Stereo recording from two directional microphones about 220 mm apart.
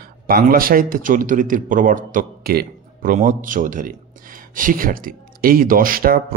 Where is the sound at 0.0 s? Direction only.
40° right (ahead or behind).